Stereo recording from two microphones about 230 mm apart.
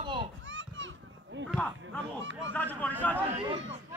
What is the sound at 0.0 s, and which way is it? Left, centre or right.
Children playing, right.